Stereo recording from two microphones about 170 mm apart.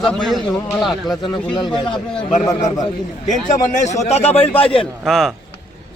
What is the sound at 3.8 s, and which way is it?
A man's voice, 40° left (ahead or behind).